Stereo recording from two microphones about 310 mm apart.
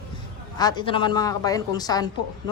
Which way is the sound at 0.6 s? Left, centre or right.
Centre.